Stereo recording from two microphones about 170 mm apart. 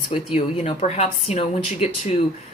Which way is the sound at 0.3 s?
40° left (ahead or behind).